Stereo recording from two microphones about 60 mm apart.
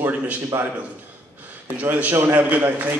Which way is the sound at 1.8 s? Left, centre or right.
Right.